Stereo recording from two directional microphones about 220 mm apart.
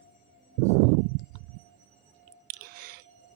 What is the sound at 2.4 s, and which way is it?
Chewing, 40° right (ahead or behind).